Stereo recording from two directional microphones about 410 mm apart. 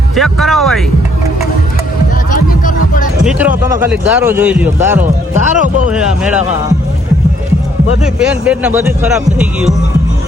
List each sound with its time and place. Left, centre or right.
0.2 s speech: centre
2.3 s music: centre
3.2 s speech: centre
5.3 s speech: centre
5.9 s speech: centre
8.0 s speech: centre